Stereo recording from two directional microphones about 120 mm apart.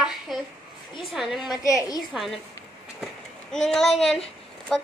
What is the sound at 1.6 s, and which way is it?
Speech, 25° left (ahead or behind).